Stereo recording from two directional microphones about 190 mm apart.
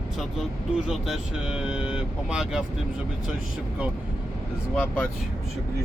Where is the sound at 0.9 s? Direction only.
Centre (ahead or behind).